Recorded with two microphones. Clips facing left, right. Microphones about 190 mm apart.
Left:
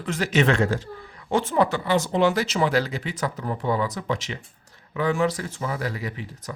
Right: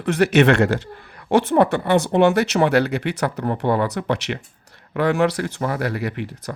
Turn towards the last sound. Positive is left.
turn(degrees=-65)  # may be behind; listen again after turning